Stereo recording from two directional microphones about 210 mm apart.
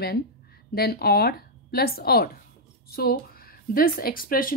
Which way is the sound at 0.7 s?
45° left (ahead or behind).